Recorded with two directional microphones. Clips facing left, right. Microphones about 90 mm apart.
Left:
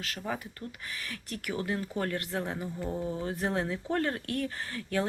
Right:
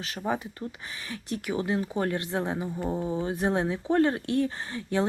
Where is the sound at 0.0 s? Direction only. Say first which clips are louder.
Right 5 dB; 20° right (ahead or behind).